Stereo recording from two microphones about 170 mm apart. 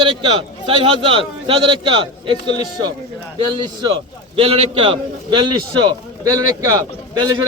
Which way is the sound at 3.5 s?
30° right (ahead or behind).